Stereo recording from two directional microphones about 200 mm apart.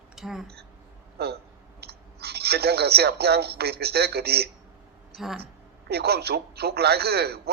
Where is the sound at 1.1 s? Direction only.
55° right (ahead or behind).